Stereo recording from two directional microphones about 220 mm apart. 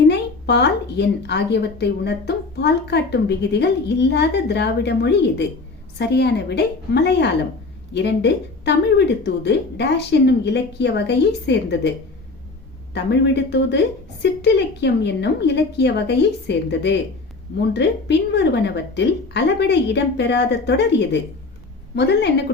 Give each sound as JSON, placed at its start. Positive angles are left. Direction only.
{"t": 0.1, "sound": "speech", "side_deg": 50}
{"t": 12.9, "sound": "speech", "side_deg": 50}